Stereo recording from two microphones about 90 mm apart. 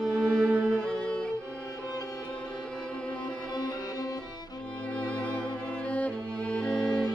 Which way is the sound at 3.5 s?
55° left (ahead or behind).